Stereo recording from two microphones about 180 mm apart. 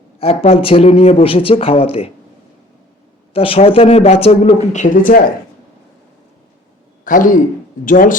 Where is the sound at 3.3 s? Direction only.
30° left (ahead or behind); by 5.2 s 50° left (ahead or behind).